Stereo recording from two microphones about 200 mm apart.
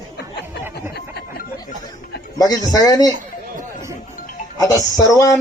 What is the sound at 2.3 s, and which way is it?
Speech, 20° left (ahead or behind).